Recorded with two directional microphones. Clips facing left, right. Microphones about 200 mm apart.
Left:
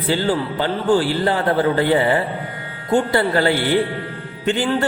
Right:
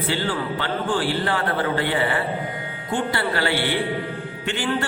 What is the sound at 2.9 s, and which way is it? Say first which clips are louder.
Speech: left 7 dB; 45° left (ahead or behind).